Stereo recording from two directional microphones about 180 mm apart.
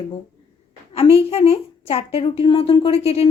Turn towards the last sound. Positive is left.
turn(degrees=35)  # may be behind; listen again after turning